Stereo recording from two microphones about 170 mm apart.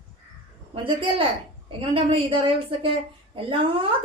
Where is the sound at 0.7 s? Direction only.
30° right (ahead or behind).